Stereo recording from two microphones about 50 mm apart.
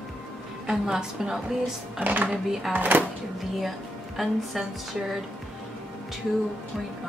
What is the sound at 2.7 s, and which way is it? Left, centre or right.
Speech, right.